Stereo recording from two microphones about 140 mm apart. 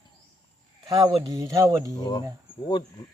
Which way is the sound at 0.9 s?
25° right (ahead or behind).